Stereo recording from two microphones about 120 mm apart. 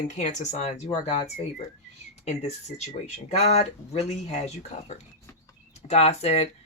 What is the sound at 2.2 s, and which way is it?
Speech, 65° left (ahead or behind).